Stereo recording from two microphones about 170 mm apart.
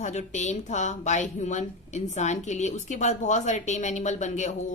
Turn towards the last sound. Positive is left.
turn(degrees=45)  # may be behind; listen again after turning